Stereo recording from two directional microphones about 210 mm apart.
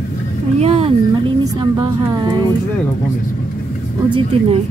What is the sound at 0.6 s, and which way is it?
Speech, 30° right (ahead or behind).